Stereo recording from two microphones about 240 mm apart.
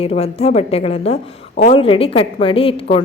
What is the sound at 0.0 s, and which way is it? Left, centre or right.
A woman's voice, left.